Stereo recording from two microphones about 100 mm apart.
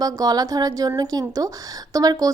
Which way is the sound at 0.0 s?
40° right (ahead or behind).